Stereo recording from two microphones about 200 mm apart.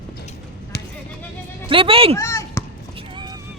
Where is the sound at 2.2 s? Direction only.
15° left (ahead or behind).